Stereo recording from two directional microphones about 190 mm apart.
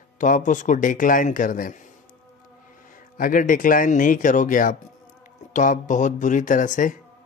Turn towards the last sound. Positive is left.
turn(degrees=45)  # may be behind; listen again after turning